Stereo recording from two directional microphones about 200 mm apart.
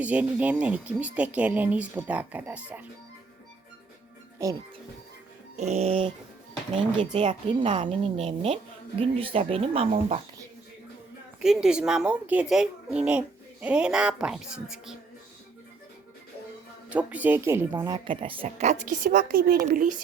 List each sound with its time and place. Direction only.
0.0 s speech: 5° right (ahead or behind)
4.4 s speech: 15° right (ahead or behind)
5.5 s a woman's voice: 35° right (ahead or behind)
11.3 s speech: 5° right (ahead or behind)
16.9 s speech: 5° right (ahead or behind)
17.8 s a woman's voice: 25° right (ahead or behind); by 20.0 s 45° right (ahead or behind)